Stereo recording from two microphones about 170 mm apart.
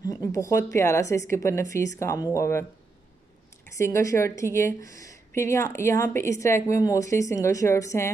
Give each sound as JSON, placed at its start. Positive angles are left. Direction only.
{"t": 0.0, "sound": "a woman's voice", "side_deg": 20}
{"t": 3.7, "sound": "a woman's voice", "side_deg": 15}